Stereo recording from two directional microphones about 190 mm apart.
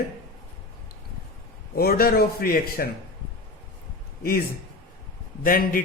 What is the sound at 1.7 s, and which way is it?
A man's voice, 50° left (ahead or behind).